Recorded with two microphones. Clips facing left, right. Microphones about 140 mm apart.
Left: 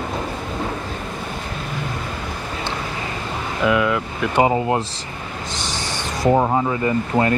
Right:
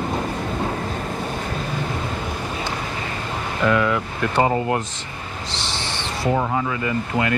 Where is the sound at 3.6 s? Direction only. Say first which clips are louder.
Left 1 dB; 5° left (ahead or behind).